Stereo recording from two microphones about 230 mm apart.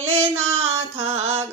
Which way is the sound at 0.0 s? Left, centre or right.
Centre.